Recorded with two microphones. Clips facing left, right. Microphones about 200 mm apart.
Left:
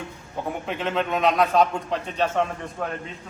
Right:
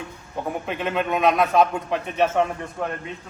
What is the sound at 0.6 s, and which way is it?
A man's voice, 5° right (ahead or behind).